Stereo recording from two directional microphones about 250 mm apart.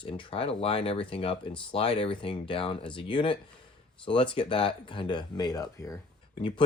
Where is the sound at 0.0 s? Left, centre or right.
Left.